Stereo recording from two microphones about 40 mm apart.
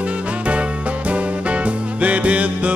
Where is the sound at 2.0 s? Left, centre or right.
Right.